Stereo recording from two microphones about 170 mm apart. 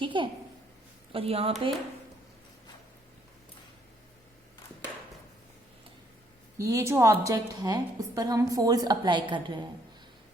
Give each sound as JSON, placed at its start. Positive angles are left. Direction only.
{"t": 0.0, "sound": "a sound", "side_deg": -30}
{"t": 1.1, "sound": "speech", "side_deg": -35}
{"t": 6.6, "sound": "a woman's voice", "side_deg": -20}